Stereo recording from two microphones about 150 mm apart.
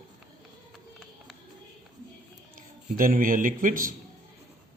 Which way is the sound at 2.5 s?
70° right (ahead or behind).